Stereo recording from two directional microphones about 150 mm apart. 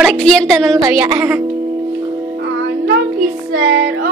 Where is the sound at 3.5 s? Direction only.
90° right.